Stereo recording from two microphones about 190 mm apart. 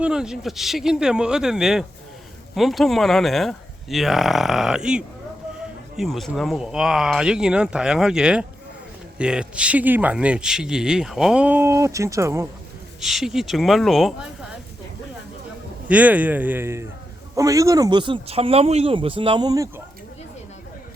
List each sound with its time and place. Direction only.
0.0 s speech: 5° right (ahead or behind)
13.0 s speech: centre (ahead or behind)
15.9 s speech: 5° right (ahead or behind)